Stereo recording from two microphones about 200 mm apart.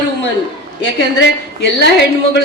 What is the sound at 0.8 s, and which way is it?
A woman's voice, 55° left (ahead or behind).